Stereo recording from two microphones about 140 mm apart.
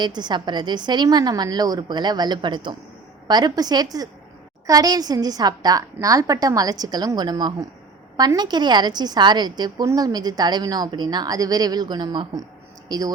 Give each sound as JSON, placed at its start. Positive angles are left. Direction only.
{"t": 0.0, "sound": "a woman's voice", "side_deg": -30}